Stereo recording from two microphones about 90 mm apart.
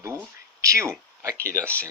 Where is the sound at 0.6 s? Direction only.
35° right (ahead or behind).